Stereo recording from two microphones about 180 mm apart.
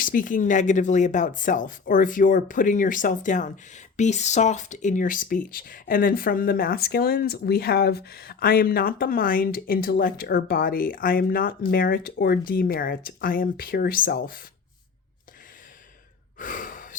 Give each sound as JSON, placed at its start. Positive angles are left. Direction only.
{"t": 0.0, "sound": "speech", "side_deg": 50}
{"t": 16.4, "sound": "sigh", "side_deg": 45}